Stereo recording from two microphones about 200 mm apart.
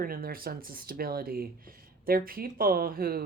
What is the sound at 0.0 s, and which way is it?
Speech, 45° right (ahead or behind).